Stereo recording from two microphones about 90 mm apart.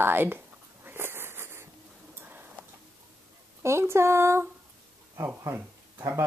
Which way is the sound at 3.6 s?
30° right (ahead or behind).